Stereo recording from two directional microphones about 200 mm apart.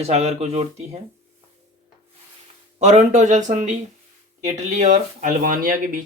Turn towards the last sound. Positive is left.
turn(degrees=-45)  # may be behind; listen again after turning